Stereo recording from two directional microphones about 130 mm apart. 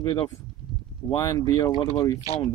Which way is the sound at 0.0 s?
40° left (ahead or behind).